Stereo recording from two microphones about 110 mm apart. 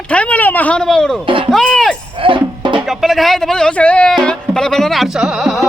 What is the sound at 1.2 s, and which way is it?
Speech, 50° right (ahead or behind).